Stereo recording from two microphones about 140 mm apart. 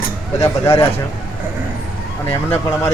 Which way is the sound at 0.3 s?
20° left (ahead or behind).